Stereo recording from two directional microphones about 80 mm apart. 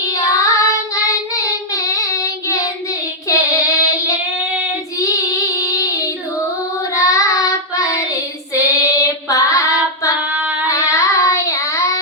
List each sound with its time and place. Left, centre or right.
0.1 s child singing: left
4.4 s child singing: centre
4.9 s child singing: left
10.2 s child singing: centre
10.7 s child singing: left